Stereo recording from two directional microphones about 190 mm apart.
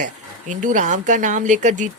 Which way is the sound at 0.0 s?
40° right (ahead or behind).